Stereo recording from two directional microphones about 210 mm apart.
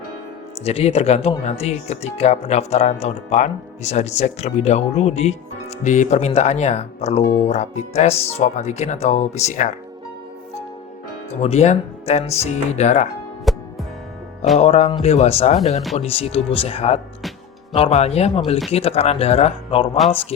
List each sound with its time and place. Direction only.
0.6 s speech: 30° left (ahead or behind)
11.3 s speech: 30° left (ahead or behind)
13.5 s music: centre (ahead or behind)
14.6 s speech: 30° left (ahead or behind)